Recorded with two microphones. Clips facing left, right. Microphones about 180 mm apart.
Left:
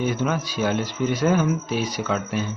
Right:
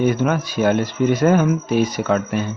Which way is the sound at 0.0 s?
55° right (ahead or behind).